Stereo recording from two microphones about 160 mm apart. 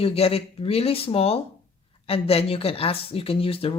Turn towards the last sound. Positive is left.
turn(degrees=35)  # may be behind; listen again after turning